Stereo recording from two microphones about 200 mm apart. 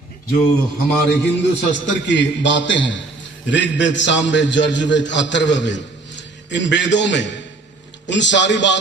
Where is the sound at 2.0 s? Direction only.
65° left (ahead or behind).